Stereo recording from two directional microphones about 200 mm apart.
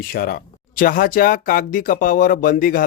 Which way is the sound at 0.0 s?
45° left (ahead or behind).